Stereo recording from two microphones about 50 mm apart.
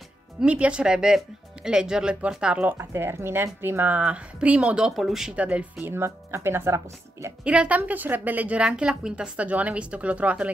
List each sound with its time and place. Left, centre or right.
0.5 s speech: right
2.9 s speech: right
3.9 s speech: right; by 5.3 s centre
5.3 s speech: right
5.9 s speech: right
7.4 s a woman's voice: right
8.6 s speech: centre